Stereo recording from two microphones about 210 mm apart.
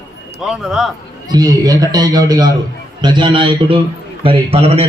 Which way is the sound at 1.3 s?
20° right (ahead or behind).